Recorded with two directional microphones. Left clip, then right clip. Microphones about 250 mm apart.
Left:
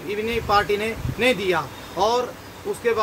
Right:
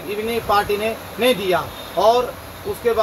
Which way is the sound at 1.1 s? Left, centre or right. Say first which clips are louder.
Right 2 dB; centre.